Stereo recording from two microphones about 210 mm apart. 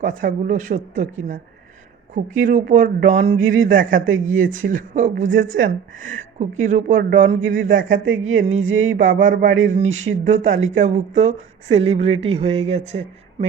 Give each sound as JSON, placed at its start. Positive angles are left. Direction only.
{"t": 0.0, "sound": "speech", "side_deg": -40}
{"t": 3.8, "sound": "speech", "side_deg": -65}
{"t": 4.5, "sound": "speech", "side_deg": -40}
{"t": 7.4, "sound": "speech", "side_deg": -65}
{"t": 9.0, "sound": "speech", "side_deg": -40}
{"t": 9.9, "sound": "speech", "side_deg": -70}
{"t": 10.8, "sound": "speech", "side_deg": -35}